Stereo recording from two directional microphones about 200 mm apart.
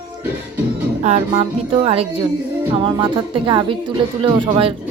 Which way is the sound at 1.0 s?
35° right (ahead or behind).